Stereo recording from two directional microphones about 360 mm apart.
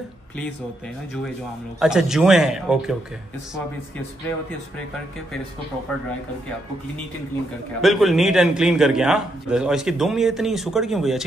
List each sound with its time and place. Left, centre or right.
1.8 s a man's voice: centre
7.8 s a man's voice: centre